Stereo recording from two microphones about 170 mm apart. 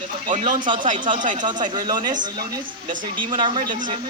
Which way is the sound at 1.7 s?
25° right (ahead or behind).